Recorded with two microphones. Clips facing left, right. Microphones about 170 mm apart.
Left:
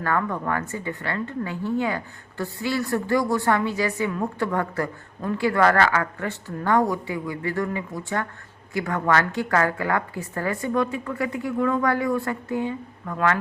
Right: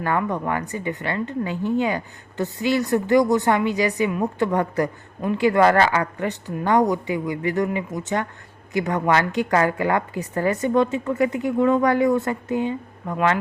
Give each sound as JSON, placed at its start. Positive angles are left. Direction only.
{"t": 0.0, "sound": "speech", "side_deg": -20}